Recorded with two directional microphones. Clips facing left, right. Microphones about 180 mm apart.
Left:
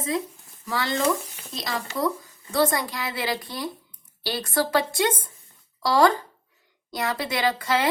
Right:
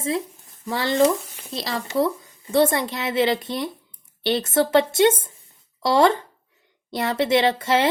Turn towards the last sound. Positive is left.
turn(degrees=-25)  # may be behind; listen again after turning